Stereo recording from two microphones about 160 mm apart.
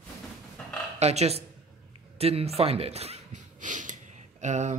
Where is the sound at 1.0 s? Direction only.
40° right (ahead or behind).